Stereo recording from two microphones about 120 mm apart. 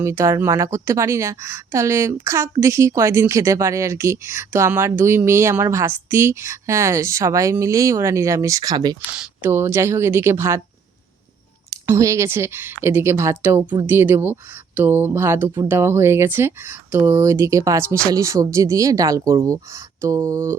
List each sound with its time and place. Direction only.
0.0 s a woman's voice: 25° right (ahead or behind)
9.1 s speech: 10° right (ahead or behind)
9.5 s a woman's voice: 20° right (ahead or behind)
11.9 s a woman's voice: 25° right (ahead or behind)